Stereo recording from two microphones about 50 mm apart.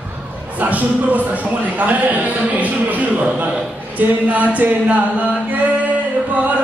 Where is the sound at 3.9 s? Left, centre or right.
Right.